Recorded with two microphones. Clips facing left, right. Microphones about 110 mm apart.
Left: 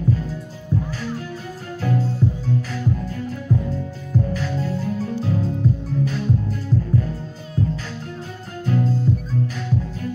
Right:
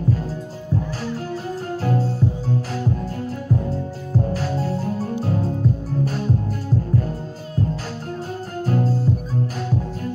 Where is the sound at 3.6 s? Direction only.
40° right (ahead or behind).